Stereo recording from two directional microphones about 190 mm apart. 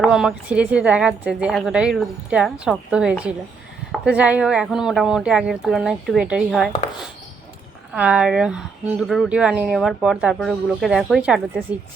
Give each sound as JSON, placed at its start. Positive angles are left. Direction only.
{"t": 0.0, "sound": "speech", "side_deg": -5}
{"t": 7.9, "sound": "speech", "side_deg": -5}